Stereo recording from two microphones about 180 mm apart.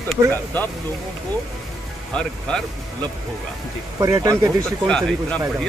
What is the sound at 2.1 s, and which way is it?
Speech, 5° left (ahead or behind).